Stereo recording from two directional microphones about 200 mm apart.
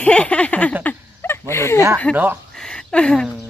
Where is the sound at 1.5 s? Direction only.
15° left (ahead or behind).